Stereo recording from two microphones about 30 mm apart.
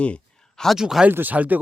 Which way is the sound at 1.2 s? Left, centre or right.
Right.